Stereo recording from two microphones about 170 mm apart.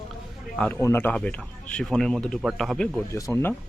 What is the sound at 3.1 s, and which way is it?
Speech, 15° left (ahead or behind).